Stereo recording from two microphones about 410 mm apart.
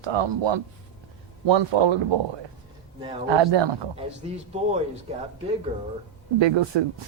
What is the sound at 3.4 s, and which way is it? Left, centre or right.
Speech, right.